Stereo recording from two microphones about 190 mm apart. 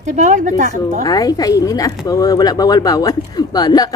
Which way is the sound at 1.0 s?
20° left (ahead or behind).